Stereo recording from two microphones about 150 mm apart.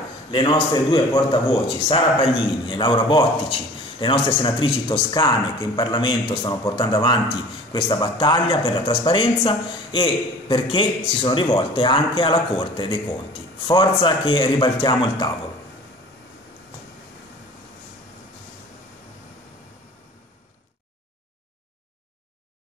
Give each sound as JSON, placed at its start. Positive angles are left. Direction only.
{"t": 0.3, "sound": "speech", "side_deg": 35}